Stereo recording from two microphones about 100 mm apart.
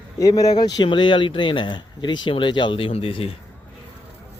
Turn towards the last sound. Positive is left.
turn(degrees=70)  # may be behind; listen again after turning